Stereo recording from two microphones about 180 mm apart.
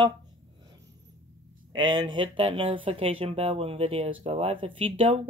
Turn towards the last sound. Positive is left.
turn(degrees=-30)  # may be behind; listen again after turning